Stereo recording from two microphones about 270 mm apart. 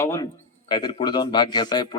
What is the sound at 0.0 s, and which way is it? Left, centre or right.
A man's voice, centre.